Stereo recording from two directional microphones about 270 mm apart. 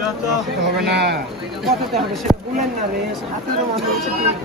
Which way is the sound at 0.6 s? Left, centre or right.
Right.